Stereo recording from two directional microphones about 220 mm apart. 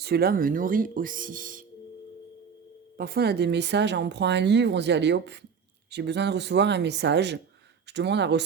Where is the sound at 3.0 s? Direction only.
45° right (ahead or behind).